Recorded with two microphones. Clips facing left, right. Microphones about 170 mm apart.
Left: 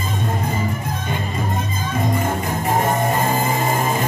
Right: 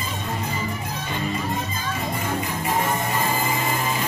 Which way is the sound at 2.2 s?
50° left (ahead or behind).